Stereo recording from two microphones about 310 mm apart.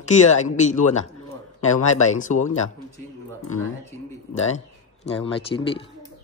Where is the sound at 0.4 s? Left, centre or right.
Left.